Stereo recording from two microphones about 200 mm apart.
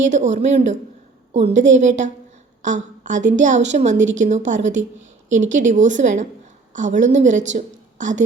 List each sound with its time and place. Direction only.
0.0 s a woman's voice: 35° right (ahead or behind)